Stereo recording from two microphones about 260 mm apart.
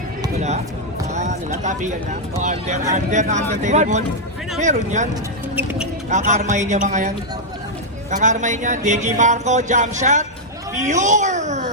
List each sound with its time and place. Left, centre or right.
0.3 s basketball bounce: right
1.1 s a sound: right
2.4 s music: right
5.5 s speech: centre
6.1 s music: right
8.1 s music: right